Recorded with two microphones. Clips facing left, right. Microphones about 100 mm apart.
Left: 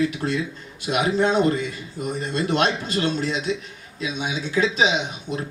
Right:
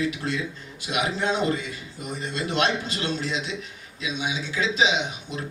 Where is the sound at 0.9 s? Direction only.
45° left (ahead or behind).